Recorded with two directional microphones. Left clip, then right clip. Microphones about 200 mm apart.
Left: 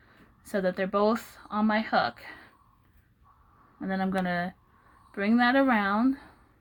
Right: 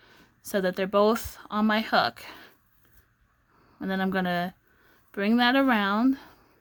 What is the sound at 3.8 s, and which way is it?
A woman's voice, 35° right (ahead or behind).